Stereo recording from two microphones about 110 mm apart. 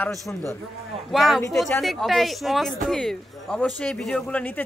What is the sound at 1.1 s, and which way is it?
Speech, centre (ahead or behind).